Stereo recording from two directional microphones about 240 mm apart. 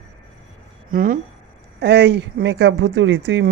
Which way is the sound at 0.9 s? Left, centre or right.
Right.